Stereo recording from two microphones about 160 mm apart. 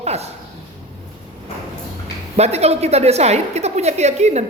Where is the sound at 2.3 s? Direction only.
40° right (ahead or behind).